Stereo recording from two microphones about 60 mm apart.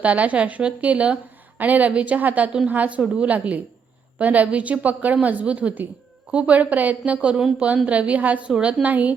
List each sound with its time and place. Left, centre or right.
0.0 s a woman's voice: right